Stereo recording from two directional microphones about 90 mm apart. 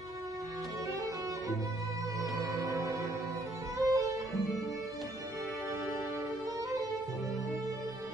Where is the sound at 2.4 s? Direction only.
40° right (ahead or behind).